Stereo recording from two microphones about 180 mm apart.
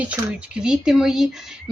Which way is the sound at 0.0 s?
5° right (ahead or behind).